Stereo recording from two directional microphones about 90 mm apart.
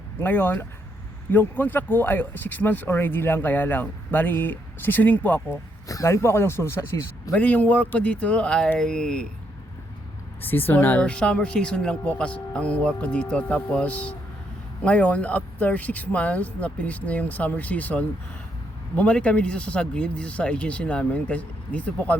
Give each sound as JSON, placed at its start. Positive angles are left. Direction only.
{"t": 0.2, "sound": "speech", "side_deg": 25}
{"t": 5.9, "sound": "speech", "side_deg": 35}
{"t": 7.3, "sound": "speech", "side_deg": 15}
{"t": 10.4, "sound": "speech", "side_deg": 20}